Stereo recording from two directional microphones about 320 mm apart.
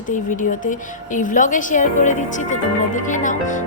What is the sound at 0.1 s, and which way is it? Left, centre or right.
A woman's voice, left.